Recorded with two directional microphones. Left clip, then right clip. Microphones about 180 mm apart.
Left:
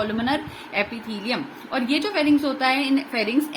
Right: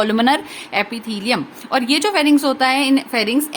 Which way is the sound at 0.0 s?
50° right (ahead or behind).